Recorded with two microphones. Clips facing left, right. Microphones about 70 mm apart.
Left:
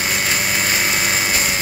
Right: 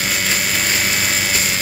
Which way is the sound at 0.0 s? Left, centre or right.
Centre.